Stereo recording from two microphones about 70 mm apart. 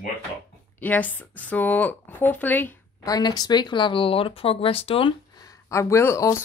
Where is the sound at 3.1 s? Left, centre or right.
Left.